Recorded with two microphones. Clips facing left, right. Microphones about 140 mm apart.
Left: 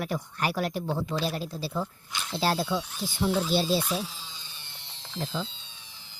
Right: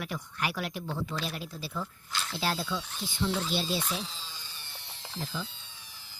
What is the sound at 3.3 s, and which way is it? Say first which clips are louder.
Speech: left 8 dB; 10° left (ahead or behind).